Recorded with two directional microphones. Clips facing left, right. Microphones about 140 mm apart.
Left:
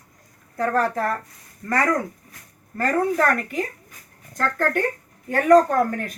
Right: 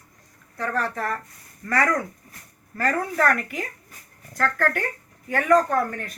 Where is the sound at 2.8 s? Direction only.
25° left (ahead or behind).